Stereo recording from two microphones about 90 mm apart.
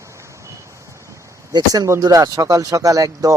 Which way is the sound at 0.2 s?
35° right (ahead or behind).